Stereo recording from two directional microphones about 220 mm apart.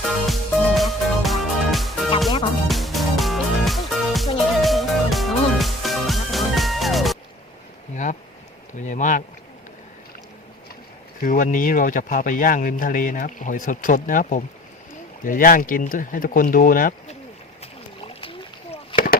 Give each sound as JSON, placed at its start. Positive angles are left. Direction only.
{"t": 0.0, "sound": "music", "side_deg": 0}
{"t": 8.8, "sound": "speech", "side_deg": 35}
{"t": 11.2, "sound": "speech", "side_deg": 35}
{"t": 17.6, "sound": "chop", "side_deg": 25}